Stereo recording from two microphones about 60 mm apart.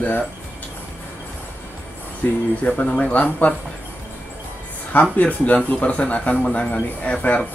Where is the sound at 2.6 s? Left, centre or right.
Centre.